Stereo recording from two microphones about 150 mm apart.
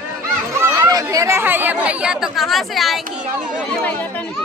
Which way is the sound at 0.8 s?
20° right (ahead or behind).